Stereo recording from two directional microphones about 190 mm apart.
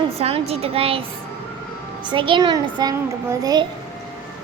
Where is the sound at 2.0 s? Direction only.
25° right (ahead or behind).